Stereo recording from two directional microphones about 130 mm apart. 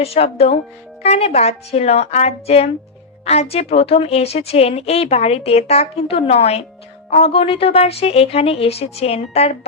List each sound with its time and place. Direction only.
0.0 s a woman's voice: 50° left (ahead or behind)